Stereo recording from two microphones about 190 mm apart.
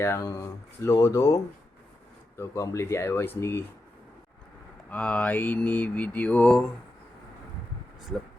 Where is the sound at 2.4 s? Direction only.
15° left (ahead or behind).